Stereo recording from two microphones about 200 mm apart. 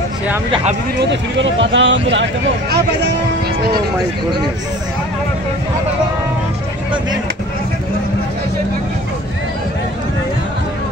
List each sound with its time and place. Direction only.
0.9 s speech: 65° right (ahead or behind)